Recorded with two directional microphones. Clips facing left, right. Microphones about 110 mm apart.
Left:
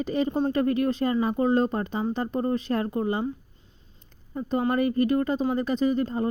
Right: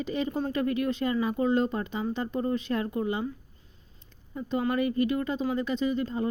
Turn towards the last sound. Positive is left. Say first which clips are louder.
# left 4 dB
turn(degrees=45)  # may be behind; listen again after turning